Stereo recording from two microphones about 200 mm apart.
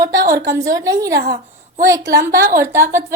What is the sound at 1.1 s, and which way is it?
Speech, 55° right (ahead or behind).